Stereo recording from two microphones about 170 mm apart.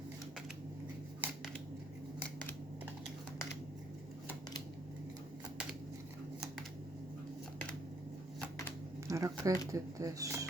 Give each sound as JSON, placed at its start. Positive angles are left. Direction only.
{"t": 9.0, "sound": "speech", "side_deg": -20}